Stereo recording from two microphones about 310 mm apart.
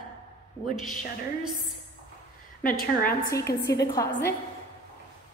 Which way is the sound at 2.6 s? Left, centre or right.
Left.